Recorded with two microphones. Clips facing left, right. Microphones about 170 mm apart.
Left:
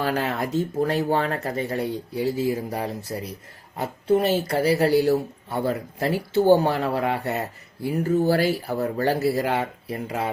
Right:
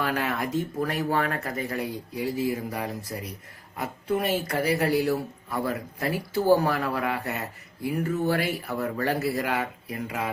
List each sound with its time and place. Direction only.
0.0 s speech: 30° left (ahead or behind)